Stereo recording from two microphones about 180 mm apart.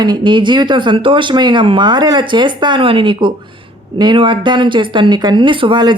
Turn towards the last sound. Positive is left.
turn(degrees=-25)  # may be behind; listen again after turning